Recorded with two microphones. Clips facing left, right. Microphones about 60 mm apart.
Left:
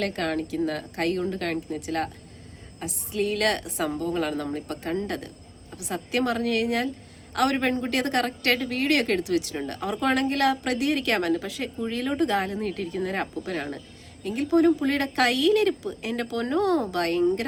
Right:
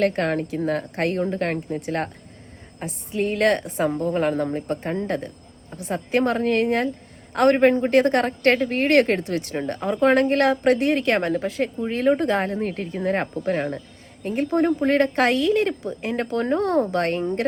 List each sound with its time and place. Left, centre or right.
0.0 s speech: right
3.1 s speech: right
11.3 s speech: right